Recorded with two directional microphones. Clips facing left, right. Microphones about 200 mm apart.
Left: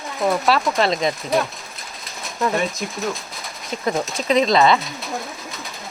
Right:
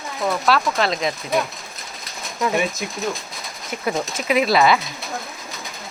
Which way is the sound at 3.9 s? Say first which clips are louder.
Left 2 dB; 5° right (ahead or behind).